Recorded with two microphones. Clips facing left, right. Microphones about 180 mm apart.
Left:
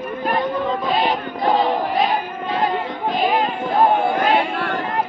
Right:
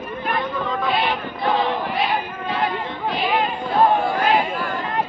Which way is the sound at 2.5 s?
45° left (ahead or behind).